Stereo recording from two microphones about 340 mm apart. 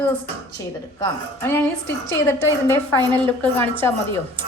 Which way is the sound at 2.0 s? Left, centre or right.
Centre.